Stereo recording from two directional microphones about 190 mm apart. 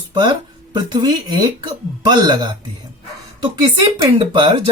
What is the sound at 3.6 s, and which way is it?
Speech, 25° right (ahead or behind).